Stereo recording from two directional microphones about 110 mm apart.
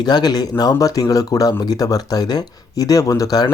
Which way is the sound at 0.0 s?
40° left (ahead or behind).